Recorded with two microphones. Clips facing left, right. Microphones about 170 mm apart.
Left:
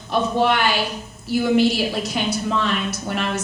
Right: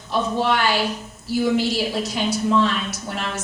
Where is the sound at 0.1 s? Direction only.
60° left (ahead or behind).